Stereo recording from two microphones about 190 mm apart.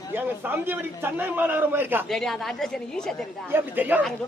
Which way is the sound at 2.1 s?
Centre (ahead or behind).